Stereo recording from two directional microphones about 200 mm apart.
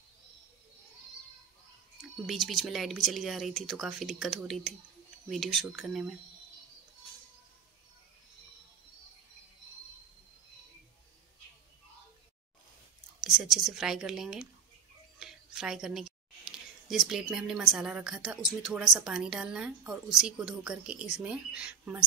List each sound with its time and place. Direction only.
2.0 s a woman's voice: centre (ahead or behind)
13.2 s a woman's voice: centre (ahead or behind)